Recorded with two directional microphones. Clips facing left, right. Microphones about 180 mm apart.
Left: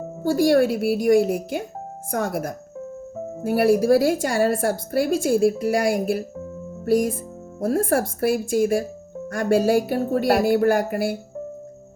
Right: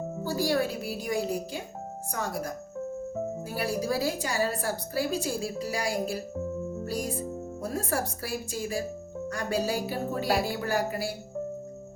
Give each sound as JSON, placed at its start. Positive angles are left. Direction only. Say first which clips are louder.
{"t": 0.3, "sound": "a woman's voice", "louder": "left 10 dB", "side_deg": 55}